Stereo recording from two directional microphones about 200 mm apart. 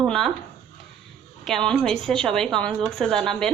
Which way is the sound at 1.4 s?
5° left (ahead or behind).